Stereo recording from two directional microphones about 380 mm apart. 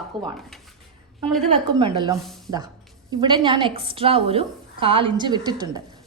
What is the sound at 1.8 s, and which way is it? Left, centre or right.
A woman's voice, centre.